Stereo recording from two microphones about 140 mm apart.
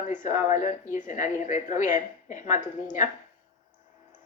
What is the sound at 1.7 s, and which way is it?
A woman's voice, 60° left (ahead or behind).